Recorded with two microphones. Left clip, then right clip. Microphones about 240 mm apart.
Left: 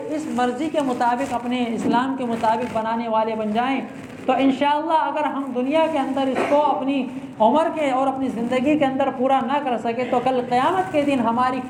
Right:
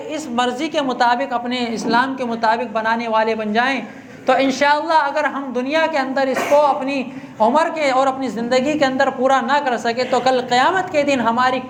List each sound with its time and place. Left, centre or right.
0.3 s a woman's voice: right